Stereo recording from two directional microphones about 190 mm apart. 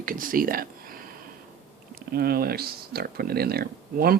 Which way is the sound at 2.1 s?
55° right (ahead or behind).